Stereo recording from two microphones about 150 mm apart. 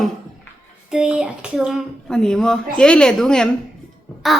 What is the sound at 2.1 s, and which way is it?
A woman's voice, 5° left (ahead or behind).